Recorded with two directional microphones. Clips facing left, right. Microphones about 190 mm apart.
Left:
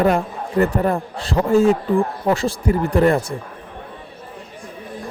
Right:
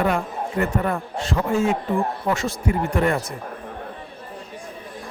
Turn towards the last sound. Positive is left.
turn(degrees=35)  # may be behind; listen again after turning